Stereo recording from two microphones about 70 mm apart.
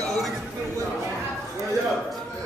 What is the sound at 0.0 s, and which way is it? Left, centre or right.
Chatter, centre.